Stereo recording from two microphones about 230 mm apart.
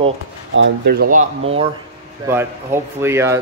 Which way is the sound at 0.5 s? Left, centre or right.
Right.